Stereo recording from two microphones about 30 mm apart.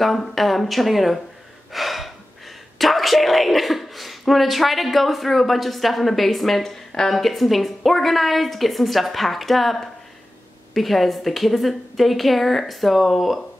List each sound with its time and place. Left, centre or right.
0.0 s a woman's voice: centre
1.7 s gasp: centre
2.8 s a woman's voice: centre
6.6 s speech: centre
7.2 s a woman's voice: centre